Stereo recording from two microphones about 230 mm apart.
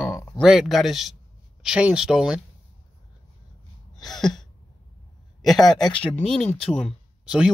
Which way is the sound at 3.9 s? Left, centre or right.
Centre.